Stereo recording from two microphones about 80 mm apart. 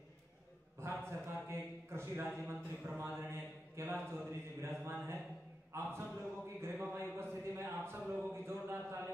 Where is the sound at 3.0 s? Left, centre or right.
Right.